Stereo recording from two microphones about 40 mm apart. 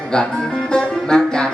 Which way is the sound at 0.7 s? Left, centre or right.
Centre.